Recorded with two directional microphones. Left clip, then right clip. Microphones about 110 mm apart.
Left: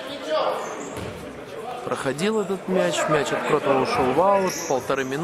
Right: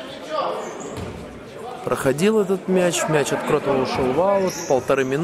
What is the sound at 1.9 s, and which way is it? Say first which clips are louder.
Speech: right 6 dB; 20° right (ahead or behind).